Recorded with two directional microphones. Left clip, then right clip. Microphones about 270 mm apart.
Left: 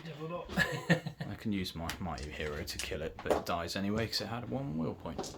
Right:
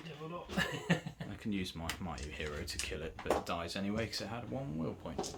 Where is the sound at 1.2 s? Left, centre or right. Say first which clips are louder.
Left 1 dB; centre.